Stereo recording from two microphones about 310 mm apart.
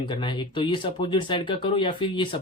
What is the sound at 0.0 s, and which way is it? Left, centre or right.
Speech, centre.